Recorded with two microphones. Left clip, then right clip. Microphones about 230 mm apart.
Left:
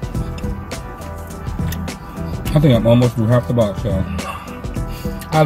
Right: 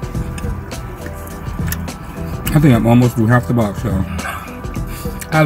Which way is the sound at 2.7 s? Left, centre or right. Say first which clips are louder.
Even; centre.